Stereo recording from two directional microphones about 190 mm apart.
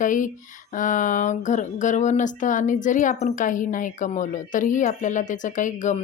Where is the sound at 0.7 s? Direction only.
45° left (ahead or behind).